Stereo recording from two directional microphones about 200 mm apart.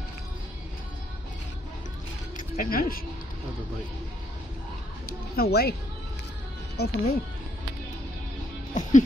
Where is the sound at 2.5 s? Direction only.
45° left (ahead or behind).